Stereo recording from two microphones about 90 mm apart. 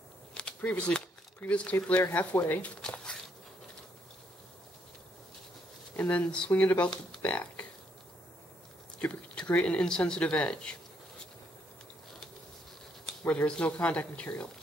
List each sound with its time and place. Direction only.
0.3 s speech: 10° left (ahead or behind)
2.8 s a sound: 10° left (ahead or behind)
5.9 s speech: 15° left (ahead or behind)
9.0 s speech: 15° left (ahead or behind)
13.2 s speech: 15° left (ahead or behind)